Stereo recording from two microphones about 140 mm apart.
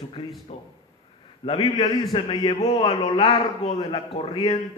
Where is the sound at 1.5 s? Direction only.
45° left (ahead or behind).